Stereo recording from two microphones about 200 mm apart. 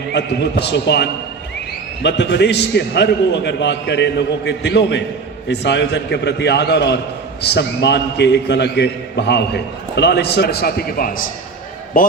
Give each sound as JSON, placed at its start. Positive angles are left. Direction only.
{"t": 0.1, "sound": "a man's voice", "side_deg": 55}